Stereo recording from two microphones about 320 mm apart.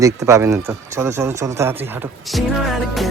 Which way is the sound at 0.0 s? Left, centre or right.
Centre.